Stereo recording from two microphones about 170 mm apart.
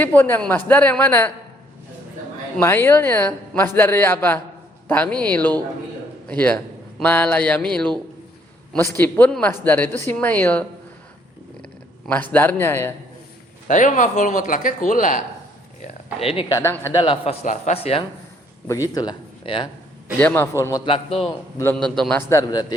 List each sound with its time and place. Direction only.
0.0 s speech: 10° left (ahead or behind)
2.6 s a man's voice: 15° left (ahead or behind)
9.0 s speech: 10° left (ahead or behind)
13.7 s speech: 45° left (ahead or behind)
16.2 s speech: 35° left (ahead or behind)
16.5 s speech: 15° left (ahead or behind)
17.0 s speech: 30° left (ahead or behind)
17.4 s speech: 45° left (ahead or behind)
18.7 s speech: 20° left (ahead or behind)
20.1 s speech: 10° left (ahead or behind)
20.8 s speech: 30° left (ahead or behind)
21.6 s a man's voice: 5° left (ahead or behind)
22.3 s speech: 20° left (ahead or behind)